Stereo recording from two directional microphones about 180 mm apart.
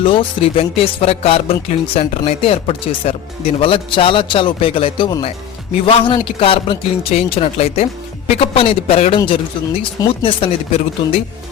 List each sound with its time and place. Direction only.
0.0 s speech: 30° left (ahead or behind)